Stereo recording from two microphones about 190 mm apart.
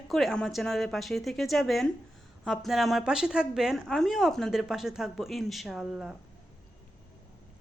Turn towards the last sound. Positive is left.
turn(degrees=-5)  # may be behind; listen again after turning